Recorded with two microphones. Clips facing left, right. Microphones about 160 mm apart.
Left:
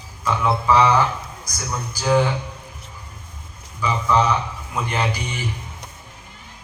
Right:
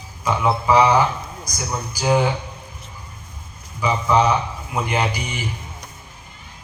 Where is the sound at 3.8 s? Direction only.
15° right (ahead or behind).